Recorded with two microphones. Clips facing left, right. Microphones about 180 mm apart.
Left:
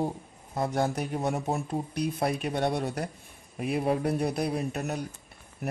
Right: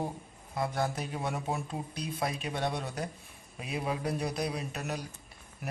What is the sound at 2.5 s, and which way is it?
Speech, 40° left (ahead or behind).